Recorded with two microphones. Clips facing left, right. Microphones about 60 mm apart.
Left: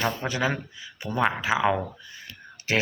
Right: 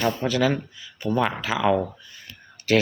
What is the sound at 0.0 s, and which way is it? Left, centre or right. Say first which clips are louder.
Speech: right 4 dB; left.